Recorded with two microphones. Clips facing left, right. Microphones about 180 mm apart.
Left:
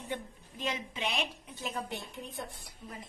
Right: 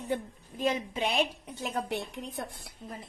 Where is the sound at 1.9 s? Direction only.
75° right (ahead or behind).